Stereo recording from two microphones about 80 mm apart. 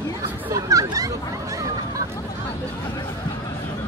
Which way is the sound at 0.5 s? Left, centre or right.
Right.